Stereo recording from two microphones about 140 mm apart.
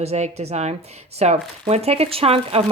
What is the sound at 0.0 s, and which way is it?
A woman's voice, 50° right (ahead or behind).